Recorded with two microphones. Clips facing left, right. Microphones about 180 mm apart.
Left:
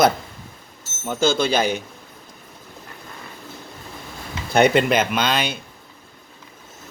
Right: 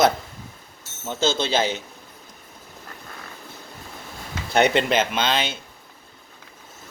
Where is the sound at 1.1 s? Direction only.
25° right (ahead or behind).